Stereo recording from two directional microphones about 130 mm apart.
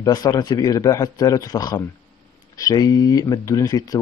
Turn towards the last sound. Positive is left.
turn(degrees=25)  # may be behind; listen again after turning